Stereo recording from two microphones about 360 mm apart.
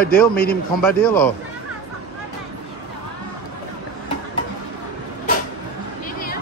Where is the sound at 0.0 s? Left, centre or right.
Left.